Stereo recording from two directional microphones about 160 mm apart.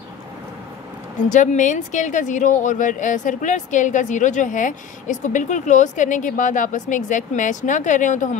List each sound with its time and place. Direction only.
1.3 s speech: 50° left (ahead or behind)